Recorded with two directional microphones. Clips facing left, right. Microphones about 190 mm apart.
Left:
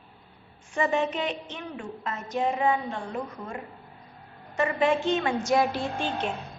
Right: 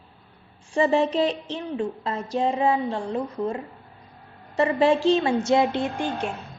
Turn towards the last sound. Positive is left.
turn(degrees=-10)  # may be behind; listen again after turning